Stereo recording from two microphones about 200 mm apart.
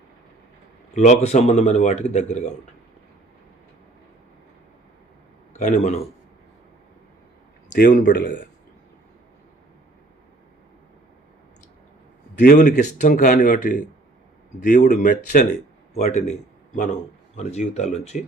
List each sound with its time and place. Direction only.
0.9 s speech: 35° left (ahead or behind)
5.5 s speech: 40° left (ahead or behind)
7.7 s a man's voice: 40° left (ahead or behind)
12.4 s a man's voice: 45° left (ahead or behind)